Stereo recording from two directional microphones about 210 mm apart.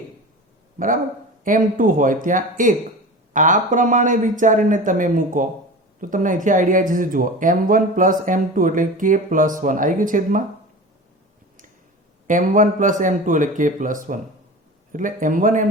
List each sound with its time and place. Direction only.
1.5 s speech: 40° right (ahead or behind)
12.3 s speech: 40° right (ahead or behind)